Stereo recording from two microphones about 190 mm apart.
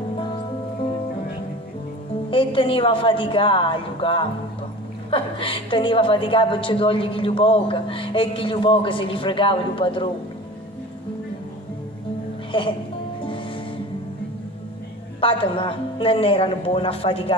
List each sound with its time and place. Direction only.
2.3 s a woman's voice: 30° left (ahead or behind)
12.5 s a woman's voice: 25° left (ahead or behind)
15.1 s a woman's voice: 30° left (ahead or behind)